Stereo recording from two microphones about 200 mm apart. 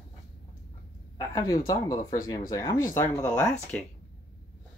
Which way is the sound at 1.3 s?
20° left (ahead or behind).